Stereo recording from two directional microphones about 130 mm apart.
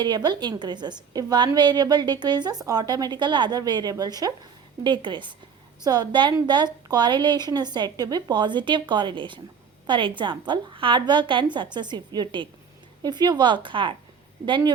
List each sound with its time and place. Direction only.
0.0 s a woman's voice: 35° right (ahead or behind)